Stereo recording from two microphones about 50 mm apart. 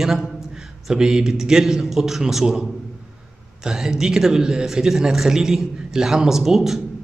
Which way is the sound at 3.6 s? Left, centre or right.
Centre.